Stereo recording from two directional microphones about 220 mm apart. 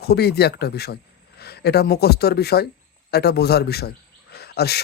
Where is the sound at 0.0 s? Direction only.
45° left (ahead or behind).